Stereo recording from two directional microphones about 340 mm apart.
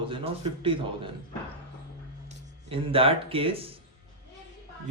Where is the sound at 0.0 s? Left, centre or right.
Centre.